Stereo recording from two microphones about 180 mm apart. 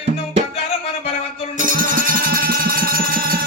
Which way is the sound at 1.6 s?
45° right (ahead or behind).